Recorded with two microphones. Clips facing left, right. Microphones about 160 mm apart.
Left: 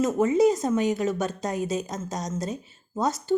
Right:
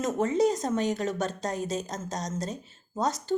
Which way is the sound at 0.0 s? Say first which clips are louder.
Left 4 dB; 10° left (ahead or behind).